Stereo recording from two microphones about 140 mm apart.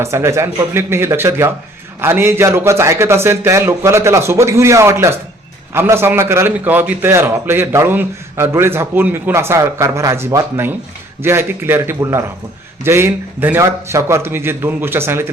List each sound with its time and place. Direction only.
0.0 s a man's voice: 20° right (ahead or behind)